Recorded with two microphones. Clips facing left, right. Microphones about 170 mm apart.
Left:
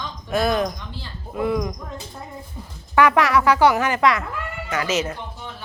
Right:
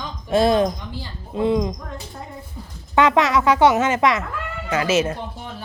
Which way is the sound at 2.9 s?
20° right (ahead or behind).